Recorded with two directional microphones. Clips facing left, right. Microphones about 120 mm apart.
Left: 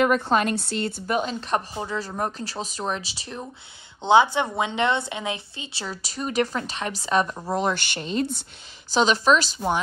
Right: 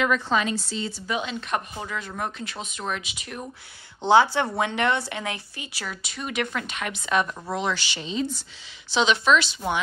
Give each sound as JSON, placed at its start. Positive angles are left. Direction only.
{"t": 0.0, "sound": "speech", "side_deg": 50}
{"t": 4.0, "sound": "a woman's voice", "side_deg": 20}
{"t": 7.5, "sound": "speech", "side_deg": 45}
{"t": 8.9, "sound": "speech", "side_deg": 40}